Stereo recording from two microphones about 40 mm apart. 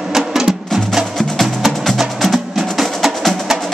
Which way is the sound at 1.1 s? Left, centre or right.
Centre.